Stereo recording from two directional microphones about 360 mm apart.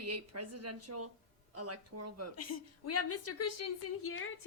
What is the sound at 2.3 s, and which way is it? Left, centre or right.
A woman's voice, left.